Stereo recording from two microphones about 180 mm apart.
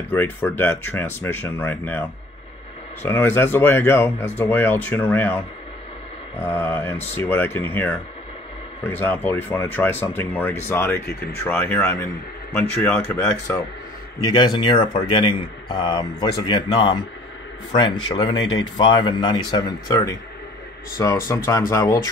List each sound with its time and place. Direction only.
0.1 s speech: 10° left (ahead or behind)
6.4 s speech: 10° left (ahead or behind)